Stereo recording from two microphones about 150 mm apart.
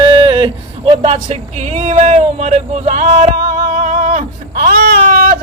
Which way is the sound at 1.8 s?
50° right (ahead or behind).